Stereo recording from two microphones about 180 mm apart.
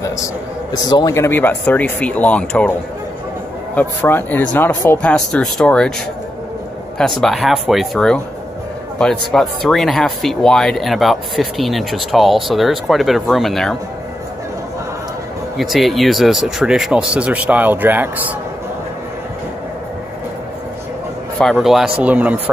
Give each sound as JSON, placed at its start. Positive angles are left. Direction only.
{"t": 0.0, "sound": "speech", "side_deg": 20}
{"t": 3.7, "sound": "speech", "side_deg": 10}
{"t": 7.0, "sound": "speech", "side_deg": 0}
{"t": 15.5, "sound": "speech", "side_deg": 0}
{"t": 21.4, "sound": "speech", "side_deg": 0}